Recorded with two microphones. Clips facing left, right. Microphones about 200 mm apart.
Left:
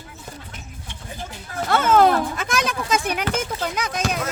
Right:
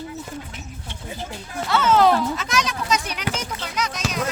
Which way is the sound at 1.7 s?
50° left (ahead or behind).